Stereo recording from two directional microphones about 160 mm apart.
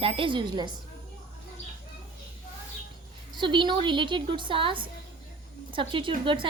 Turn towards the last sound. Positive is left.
turn(degrees=-30)  # may be behind; listen again after turning